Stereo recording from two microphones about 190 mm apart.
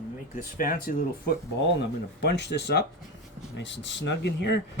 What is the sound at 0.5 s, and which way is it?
Speech, 50° left (ahead or behind).